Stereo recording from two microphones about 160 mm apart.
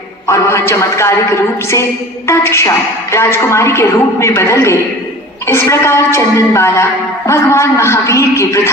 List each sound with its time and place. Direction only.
0.3 s a man's voice: 15° left (ahead or behind)